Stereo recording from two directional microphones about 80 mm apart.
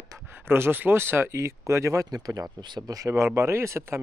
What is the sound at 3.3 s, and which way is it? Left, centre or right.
Speech, right.